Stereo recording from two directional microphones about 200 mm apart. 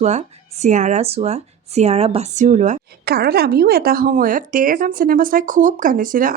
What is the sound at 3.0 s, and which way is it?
A woman's voice, 50° right (ahead or behind).